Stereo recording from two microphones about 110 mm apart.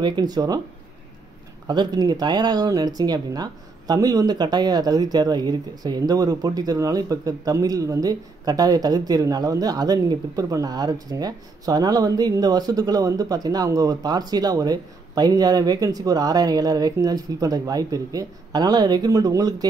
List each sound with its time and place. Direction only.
0.0 s speech: 40° right (ahead or behind)
1.7 s speech: 40° right (ahead or behind)